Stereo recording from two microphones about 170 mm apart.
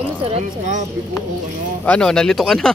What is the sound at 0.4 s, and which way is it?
Speech, 45° right (ahead or behind).